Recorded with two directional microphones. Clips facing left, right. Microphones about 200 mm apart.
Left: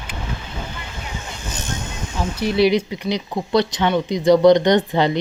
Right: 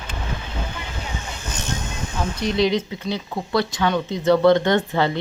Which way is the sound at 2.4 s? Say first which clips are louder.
Left 4 dB; 10° left (ahead or behind).